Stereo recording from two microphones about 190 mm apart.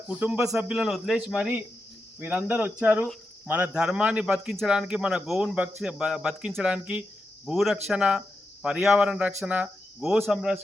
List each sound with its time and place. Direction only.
0.1 s a man's voice: 5° right (ahead or behind)